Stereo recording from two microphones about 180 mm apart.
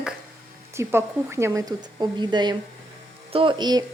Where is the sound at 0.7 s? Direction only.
15° right (ahead or behind).